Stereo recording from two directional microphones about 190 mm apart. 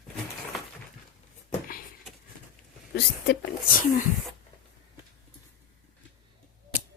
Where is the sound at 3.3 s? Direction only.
55° left (ahead or behind).